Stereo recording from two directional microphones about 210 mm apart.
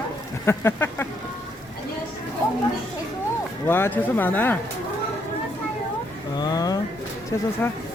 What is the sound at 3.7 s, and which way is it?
Speech, 10° left (ahead or behind).